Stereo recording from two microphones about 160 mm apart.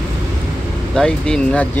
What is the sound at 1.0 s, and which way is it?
Speech, 5° left (ahead or behind).